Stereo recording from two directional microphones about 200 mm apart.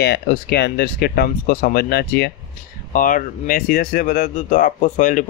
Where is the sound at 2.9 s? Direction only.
45° left (ahead or behind).